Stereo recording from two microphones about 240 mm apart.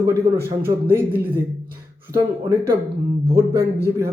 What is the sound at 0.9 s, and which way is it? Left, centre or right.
Speech, centre.